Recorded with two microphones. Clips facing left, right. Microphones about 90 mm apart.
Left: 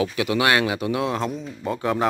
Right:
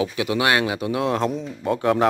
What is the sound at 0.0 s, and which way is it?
Speech, 20° right (ahead or behind).